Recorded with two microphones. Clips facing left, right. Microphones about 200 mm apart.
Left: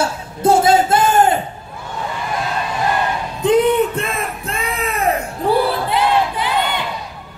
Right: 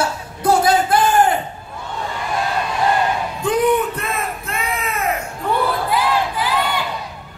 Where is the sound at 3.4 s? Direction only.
25° left (ahead or behind).